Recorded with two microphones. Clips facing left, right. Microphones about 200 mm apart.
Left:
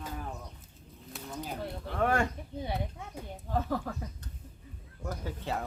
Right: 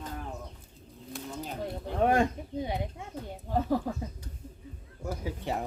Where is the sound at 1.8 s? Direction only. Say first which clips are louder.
Right 4 dB; 20° right (ahead or behind).